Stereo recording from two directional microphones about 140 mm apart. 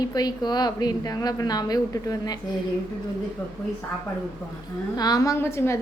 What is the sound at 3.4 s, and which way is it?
Speech, 10° left (ahead or behind).